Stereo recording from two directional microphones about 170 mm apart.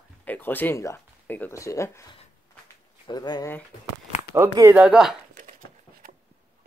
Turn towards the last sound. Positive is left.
turn(degrees=-5)  # may be behind; listen again after turning